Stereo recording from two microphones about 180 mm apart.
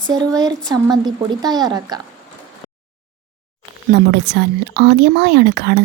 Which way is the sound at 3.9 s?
70° right (ahead or behind).